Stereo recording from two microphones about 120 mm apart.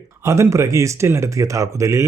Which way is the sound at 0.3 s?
25° right (ahead or behind).